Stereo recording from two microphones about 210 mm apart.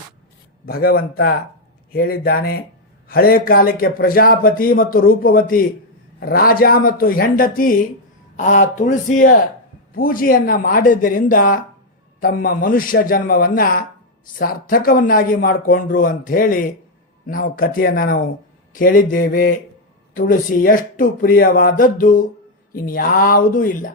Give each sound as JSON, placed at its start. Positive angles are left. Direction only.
{"t": 0.6, "sound": "a man's voice", "side_deg": 45}